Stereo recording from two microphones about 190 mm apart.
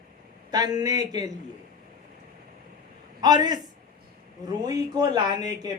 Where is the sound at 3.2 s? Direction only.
20° right (ahead or behind).